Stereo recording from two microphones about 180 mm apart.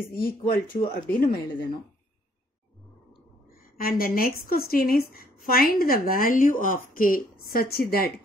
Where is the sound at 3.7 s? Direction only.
55° left (ahead or behind).